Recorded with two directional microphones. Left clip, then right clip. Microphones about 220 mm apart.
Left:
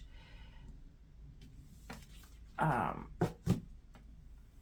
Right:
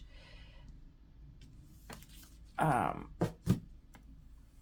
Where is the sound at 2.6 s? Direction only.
55° right (ahead or behind).